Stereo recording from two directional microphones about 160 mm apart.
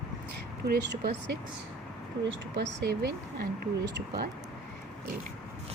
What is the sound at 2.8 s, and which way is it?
Speech, 90° right.